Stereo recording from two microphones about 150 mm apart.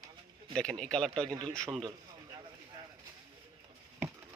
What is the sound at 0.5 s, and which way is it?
Speech, 5° left (ahead or behind).